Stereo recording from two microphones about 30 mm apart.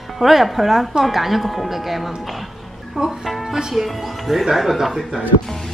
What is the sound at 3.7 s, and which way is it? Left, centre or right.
A woman's voice, centre.